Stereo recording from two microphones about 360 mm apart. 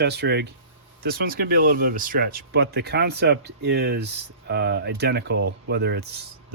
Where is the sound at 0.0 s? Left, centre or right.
Right.